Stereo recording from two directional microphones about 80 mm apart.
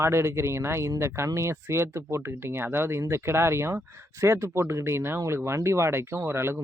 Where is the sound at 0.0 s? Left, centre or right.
Right.